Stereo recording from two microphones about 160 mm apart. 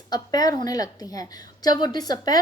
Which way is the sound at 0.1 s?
25° left (ahead or behind).